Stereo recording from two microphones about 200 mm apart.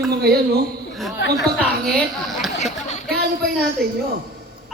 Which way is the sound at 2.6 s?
35° left (ahead or behind).